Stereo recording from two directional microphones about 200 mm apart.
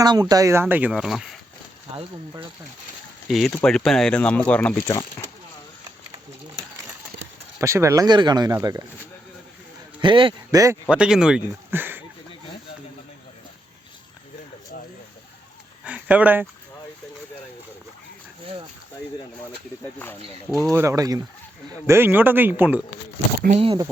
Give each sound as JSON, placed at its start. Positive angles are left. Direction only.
{"t": 0.0, "sound": "speech", "side_deg": -20}
{"t": 3.2, "sound": "speech", "side_deg": 0}
{"t": 7.6, "sound": "speech", "side_deg": -15}
{"t": 10.0, "sound": "speech", "side_deg": -25}
{"t": 10.8, "sound": "speech", "side_deg": -5}
{"t": 15.8, "sound": "a sound", "side_deg": -5}
{"t": 20.7, "sound": "speech", "side_deg": -15}
{"t": 23.6, "sound": "speech", "side_deg": -25}